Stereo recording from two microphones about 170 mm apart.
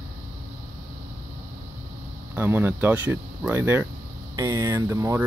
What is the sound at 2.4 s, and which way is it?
Speech, 10° right (ahead or behind).